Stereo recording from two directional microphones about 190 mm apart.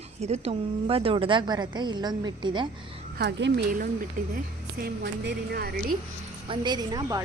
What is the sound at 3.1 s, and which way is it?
A woman's voice, 60° right (ahead or behind).